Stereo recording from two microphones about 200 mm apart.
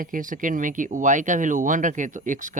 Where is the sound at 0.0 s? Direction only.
40° right (ahead or behind).